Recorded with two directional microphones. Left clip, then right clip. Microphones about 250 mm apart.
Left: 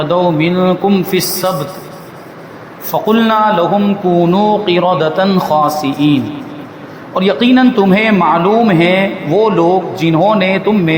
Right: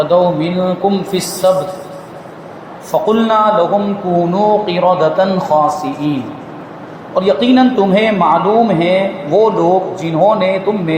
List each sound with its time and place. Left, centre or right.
0.0 s a man's voice: left
2.9 s a man's voice: left
7.1 s a man's voice: left